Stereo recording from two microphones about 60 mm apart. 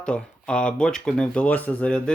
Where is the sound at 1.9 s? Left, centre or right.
Centre.